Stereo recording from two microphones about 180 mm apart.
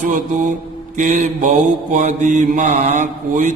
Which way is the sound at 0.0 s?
45° right (ahead or behind).